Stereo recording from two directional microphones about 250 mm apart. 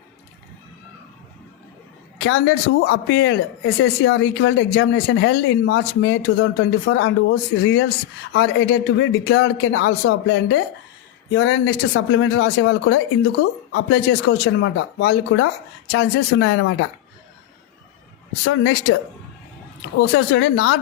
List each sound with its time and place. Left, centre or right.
2.1 s a sound: left
2.8 s speech: left
18.4 s speech: left
20.0 s speech: left